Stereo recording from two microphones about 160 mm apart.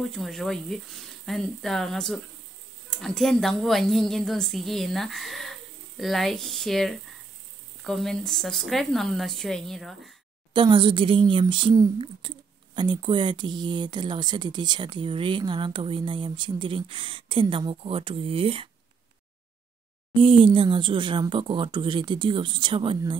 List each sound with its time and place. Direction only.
0.0 s a woman's voice: centre (ahead or behind)
10.5 s speech: 30° right (ahead or behind)
20.2 s speech: 35° right (ahead or behind)